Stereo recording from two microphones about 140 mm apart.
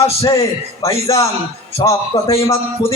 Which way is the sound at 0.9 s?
20° left (ahead or behind).